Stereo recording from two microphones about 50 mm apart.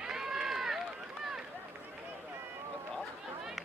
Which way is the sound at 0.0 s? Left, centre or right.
Centre.